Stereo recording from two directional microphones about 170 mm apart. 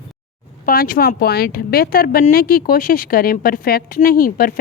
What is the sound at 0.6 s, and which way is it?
A woman's voice, 60° left (ahead or behind).